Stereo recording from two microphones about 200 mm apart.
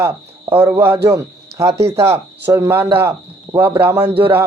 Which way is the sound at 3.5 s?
25° right (ahead or behind).